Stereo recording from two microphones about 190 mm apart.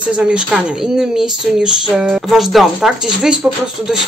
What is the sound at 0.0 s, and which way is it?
Speech, 5° right (ahead or behind).